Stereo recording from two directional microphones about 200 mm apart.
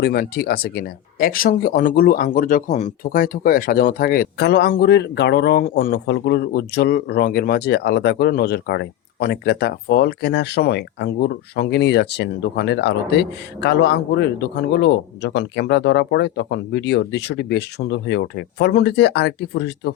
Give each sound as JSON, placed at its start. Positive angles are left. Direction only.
{"t": 0.0, "sound": "speech", "side_deg": 50}